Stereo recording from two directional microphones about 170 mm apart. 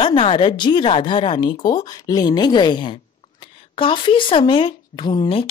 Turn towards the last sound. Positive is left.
turn(degrees=30)  # may be behind; listen again after turning